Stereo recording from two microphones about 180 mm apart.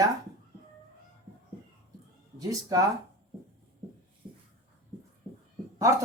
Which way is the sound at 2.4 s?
20° right (ahead or behind).